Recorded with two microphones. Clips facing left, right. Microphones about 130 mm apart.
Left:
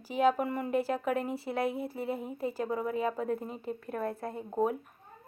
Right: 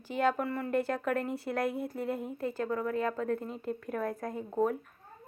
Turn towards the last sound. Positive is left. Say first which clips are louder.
# even
turn(degrees=5)  # may be behind; listen again after turning